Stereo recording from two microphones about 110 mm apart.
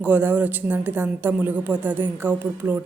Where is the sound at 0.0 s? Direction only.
15° right (ahead or behind).